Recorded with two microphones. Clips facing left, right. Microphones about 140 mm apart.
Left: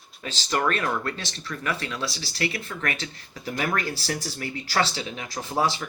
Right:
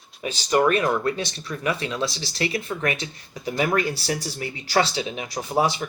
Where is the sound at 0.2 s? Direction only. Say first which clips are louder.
Right 6 dB; 15° right (ahead or behind).